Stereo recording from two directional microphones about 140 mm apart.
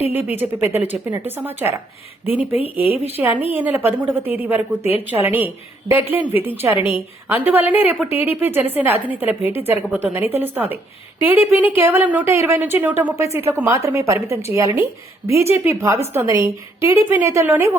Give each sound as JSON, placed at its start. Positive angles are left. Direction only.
{"t": 0.0, "sound": "a woman's voice", "side_deg": -15}